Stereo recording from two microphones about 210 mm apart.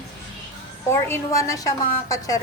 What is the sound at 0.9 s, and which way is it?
A woman's voice, 15° left (ahead or behind).